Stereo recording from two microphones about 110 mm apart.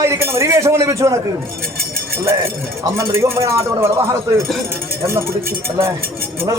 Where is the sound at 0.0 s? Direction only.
25° right (ahead or behind).